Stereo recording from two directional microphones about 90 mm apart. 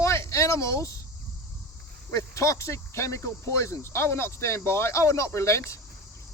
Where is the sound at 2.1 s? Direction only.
35° left (ahead or behind).